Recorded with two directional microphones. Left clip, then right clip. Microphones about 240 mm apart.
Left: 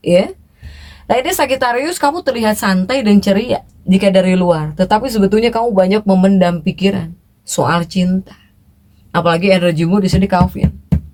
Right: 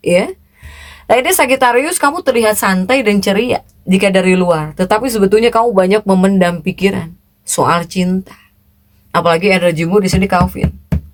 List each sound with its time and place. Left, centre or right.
0.0 s speech: right